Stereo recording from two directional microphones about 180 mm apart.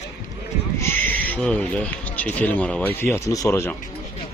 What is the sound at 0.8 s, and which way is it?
Speech, 10° left (ahead or behind).